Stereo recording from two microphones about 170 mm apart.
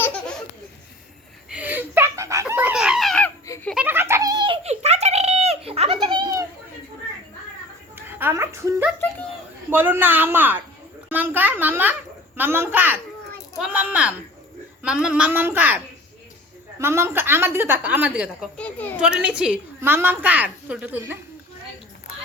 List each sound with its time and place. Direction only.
0.0 s laughter: 5° left (ahead or behind)
1.5 s a sound: 10° right (ahead or behind)
3.4 s baby laughter: 20° left (ahead or behind)
3.8 s giggle: 15° right (ahead or behind); by 6.0 s 35° right (ahead or behind)
6.1 s children playing: 25° right (ahead or behind)
7.9 s a sound: 15° right (ahead or behind)
9.6 s a woman's voice: 10° right (ahead or behind)
11.1 s a sound: 10° right (ahead or behind)
12.4 s a woman's voice: 10° right (ahead or behind)
13.6 s a sound: 10° right (ahead or behind)
14.8 s a woman's voice: 5° right (ahead or behind)
18.5 s a child's voice: 10° left (ahead or behind)
18.9 s a woman's voice: 5° right (ahead or behind)